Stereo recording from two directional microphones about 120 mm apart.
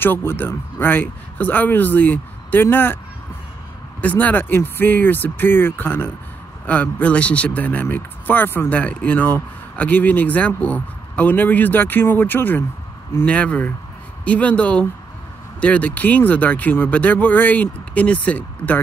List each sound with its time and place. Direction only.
0.0 s speech: 20° left (ahead or behind)
4.0 s speech: 15° left (ahead or behind)